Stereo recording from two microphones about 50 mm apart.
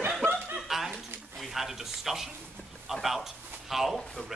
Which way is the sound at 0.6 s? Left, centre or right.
Centre.